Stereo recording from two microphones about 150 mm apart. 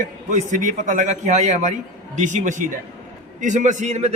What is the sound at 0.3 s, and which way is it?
A man's voice, 60° right (ahead or behind).